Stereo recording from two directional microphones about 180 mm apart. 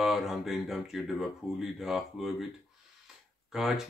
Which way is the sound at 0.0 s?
Centre (ahead or behind).